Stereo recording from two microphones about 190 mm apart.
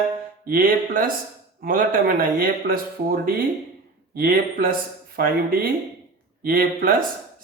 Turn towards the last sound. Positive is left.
turn(degrees=-50)  # may be behind; listen again after turning